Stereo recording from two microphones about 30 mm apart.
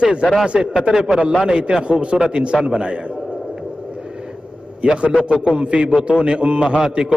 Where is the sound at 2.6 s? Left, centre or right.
Right.